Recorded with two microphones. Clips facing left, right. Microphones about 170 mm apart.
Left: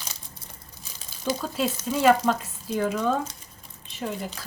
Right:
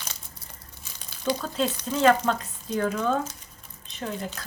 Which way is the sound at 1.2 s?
5° left (ahead or behind).